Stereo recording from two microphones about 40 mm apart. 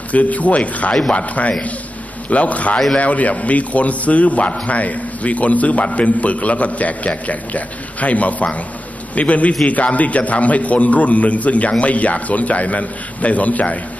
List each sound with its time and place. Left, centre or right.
0.1 s a man's voice: left